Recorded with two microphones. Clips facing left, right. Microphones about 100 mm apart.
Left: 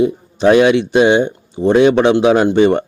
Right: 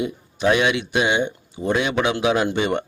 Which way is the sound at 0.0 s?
35° left (ahead or behind).